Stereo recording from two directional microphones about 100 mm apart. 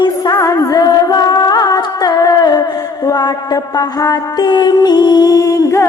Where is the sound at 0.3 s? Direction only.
30° left (ahead or behind).